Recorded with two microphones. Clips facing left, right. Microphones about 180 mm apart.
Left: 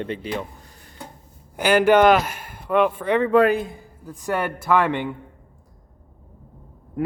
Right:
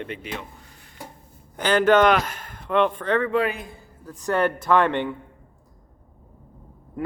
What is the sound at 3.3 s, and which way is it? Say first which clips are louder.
Speech: left 7 dB; 45° left (ahead or behind).